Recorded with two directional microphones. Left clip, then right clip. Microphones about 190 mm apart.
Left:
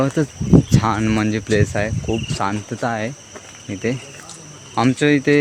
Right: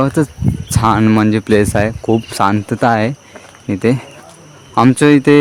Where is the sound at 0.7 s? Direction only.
45° right (ahead or behind).